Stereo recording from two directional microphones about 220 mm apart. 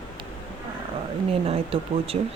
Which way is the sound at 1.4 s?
25° right (ahead or behind).